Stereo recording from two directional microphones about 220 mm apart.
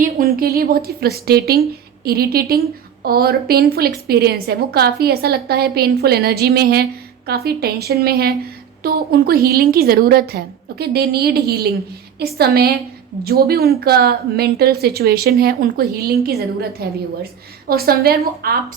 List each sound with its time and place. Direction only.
0.0 s a woman's voice: 40° right (ahead or behind)